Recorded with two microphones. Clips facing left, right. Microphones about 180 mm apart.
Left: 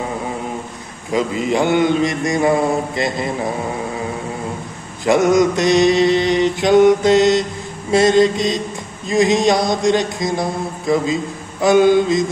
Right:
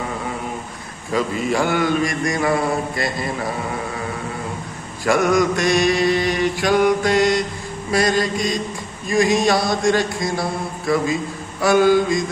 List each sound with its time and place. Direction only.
1.1 s mantra: 20° left (ahead or behind)
5.0 s mantra: 20° left (ahead or behind)